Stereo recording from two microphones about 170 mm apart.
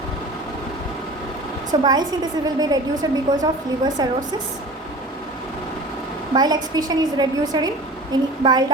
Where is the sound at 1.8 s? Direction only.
25° right (ahead or behind).